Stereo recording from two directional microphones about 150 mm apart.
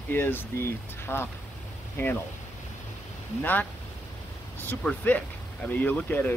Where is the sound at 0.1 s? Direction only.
15° left (ahead or behind).